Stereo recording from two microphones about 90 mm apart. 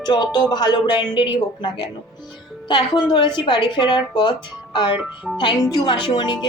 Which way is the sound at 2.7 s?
55° left (ahead or behind).